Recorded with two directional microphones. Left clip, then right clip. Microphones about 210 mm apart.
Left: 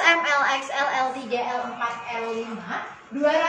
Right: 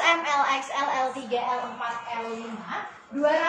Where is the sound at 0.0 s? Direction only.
15° left (ahead or behind).